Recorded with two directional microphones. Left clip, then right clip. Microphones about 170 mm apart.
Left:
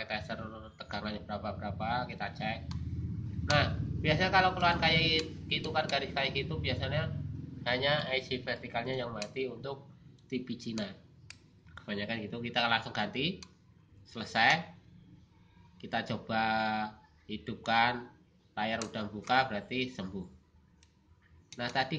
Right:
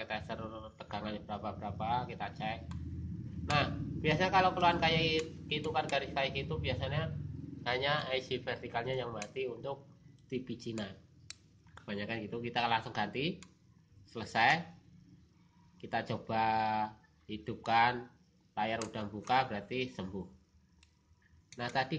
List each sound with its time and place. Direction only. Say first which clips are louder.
0.0 s a sound: left 2 dB; 25° right (ahead or behind)
3.5 s speech: left 2 dB; 30° right (ahead or behind)
15.8 s speech: left 1 dB; 25° right (ahead or behind)
21.5 s speech: left 2 dB; 25° right (ahead or behind)